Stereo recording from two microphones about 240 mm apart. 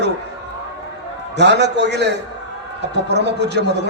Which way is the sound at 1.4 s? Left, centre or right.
Right.